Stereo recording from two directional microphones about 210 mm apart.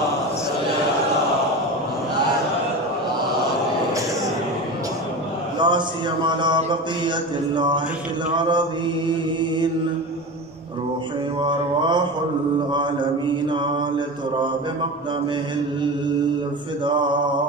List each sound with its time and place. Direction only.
5.6 s a man's voice: 20° right (ahead or behind)
9.1 s mantra: 20° right (ahead or behind)
11.4 s mantra: 20° right (ahead or behind)